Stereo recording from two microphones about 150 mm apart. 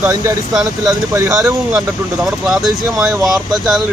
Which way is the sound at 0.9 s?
20° right (ahead or behind).